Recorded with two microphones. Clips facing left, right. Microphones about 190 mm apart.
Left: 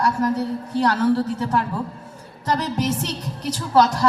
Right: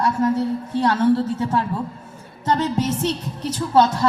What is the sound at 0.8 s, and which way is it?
Speech, 25° right (ahead or behind).